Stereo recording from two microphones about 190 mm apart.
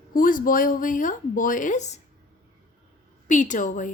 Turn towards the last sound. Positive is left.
turn(degrees=40)  # may be behind; listen again after turning